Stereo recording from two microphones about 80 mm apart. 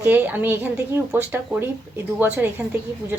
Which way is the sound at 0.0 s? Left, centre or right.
Right.